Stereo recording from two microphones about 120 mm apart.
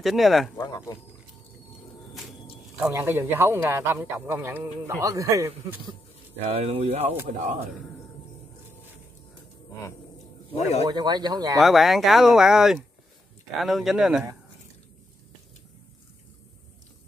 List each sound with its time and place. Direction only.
0.0 s speech: centre (ahead or behind)
2.9 s speech: 20° right (ahead or behind)
6.3 s speech: 60° right (ahead or behind)
10.5 s speech: 60° left (ahead or behind)
10.9 s speech: 35° right (ahead or behind)
11.6 s speech: centre (ahead or behind)